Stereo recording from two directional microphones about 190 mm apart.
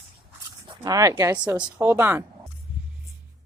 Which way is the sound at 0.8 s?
15° right (ahead or behind).